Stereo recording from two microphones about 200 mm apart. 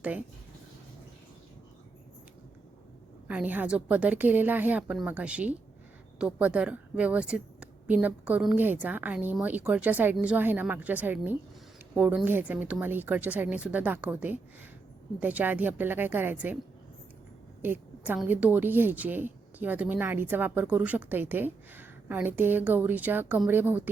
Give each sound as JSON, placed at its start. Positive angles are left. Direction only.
{"t": 0.0, "sound": "speech", "side_deg": -5}
{"t": 3.2, "sound": "a woman's voice", "side_deg": -10}
{"t": 17.6, "sound": "a woman's voice", "side_deg": -10}